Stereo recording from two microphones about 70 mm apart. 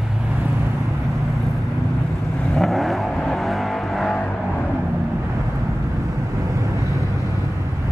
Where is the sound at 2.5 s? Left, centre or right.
Centre.